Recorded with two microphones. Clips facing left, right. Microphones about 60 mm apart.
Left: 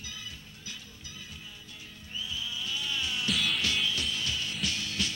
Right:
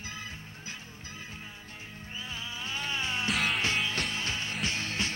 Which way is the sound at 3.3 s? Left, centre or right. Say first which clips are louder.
Right 1 dB; right.